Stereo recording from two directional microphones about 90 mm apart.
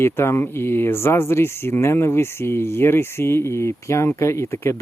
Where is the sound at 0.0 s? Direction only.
30° left (ahead or behind).